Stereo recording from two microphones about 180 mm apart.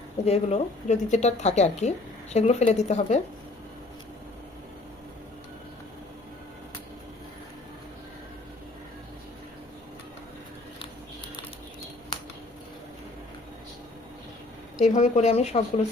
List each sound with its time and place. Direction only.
0.3 s speech: 35° left (ahead or behind)
14.8 s speech: 40° left (ahead or behind)